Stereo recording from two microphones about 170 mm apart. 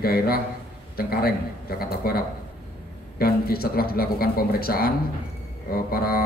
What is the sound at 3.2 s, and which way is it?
Speech, 65° left (ahead or behind).